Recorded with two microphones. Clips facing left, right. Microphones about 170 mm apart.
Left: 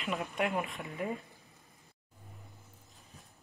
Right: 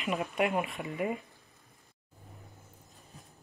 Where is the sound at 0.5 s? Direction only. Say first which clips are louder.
Right 3 dB; 15° right (ahead or behind).